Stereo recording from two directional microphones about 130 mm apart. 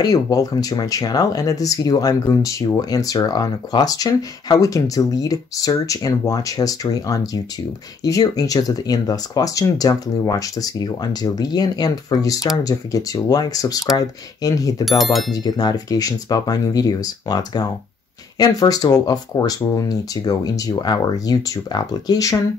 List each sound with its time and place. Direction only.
0.0 s speech: 30° left (ahead or behind)